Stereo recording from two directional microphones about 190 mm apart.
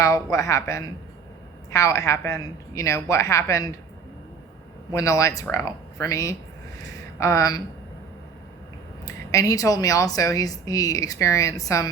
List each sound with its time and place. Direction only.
0.0 s a woman's voice: 15° left (ahead or behind)
4.9 s a woman's voice: 15° left (ahead or behind)
9.0 s a woman's voice: 15° left (ahead or behind)